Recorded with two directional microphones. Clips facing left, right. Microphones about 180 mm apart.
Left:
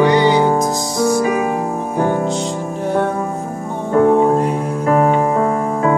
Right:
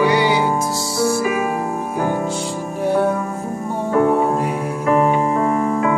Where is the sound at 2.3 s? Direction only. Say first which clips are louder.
Left 2 dB; 10° right (ahead or behind).